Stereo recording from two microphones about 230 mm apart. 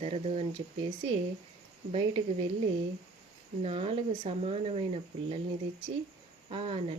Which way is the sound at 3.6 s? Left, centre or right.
Right.